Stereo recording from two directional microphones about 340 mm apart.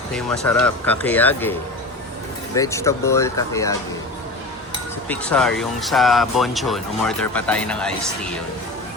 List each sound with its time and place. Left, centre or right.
0.1 s speech: centre
2.6 s speech: centre
5.0 s speech: centre